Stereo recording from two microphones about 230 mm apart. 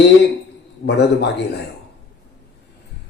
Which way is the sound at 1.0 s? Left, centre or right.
Left.